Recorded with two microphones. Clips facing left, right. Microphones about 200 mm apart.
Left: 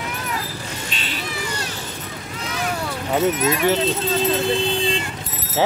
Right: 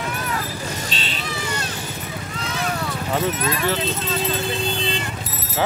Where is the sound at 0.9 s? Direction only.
30° right (ahead or behind).